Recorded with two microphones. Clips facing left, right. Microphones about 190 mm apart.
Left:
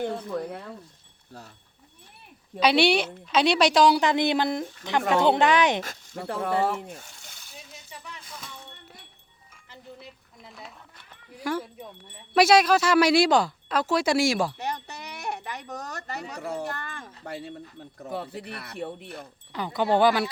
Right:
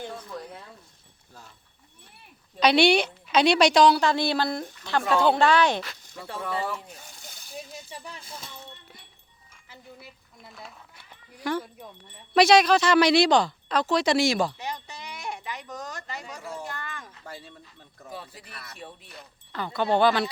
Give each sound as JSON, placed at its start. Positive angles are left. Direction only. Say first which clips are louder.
{"t": 0.0, "sound": "speech", "louder": "left 7 dB", "side_deg": 60}
{"t": 2.6, "sound": "a woman's voice", "louder": "right 1 dB", "side_deg": 5}
{"t": 5.8, "sound": "speech", "louder": "left 5 dB", "side_deg": 50}
{"t": 7.1, "sound": "coin", "louder": "right 6 dB", "side_deg": -35}
{"t": 9.6, "sound": "a sound", "louder": "left 2 dB", "side_deg": -5}
{"t": 11.3, "sound": "speech", "louder": "even", "side_deg": 5}
{"t": 14.6, "sound": "speech", "louder": "left 3 dB", "side_deg": 65}
{"t": 16.8, "sound": "speech", "louder": "even", "side_deg": 35}
{"t": 17.2, "sound": "speech", "louder": "left 8 dB", "side_deg": 65}
{"t": 17.5, "sound": "speech", "louder": "left 10 dB", "side_deg": 50}
{"t": 19.5, "sound": "speech", "louder": "left 1 dB", "side_deg": 15}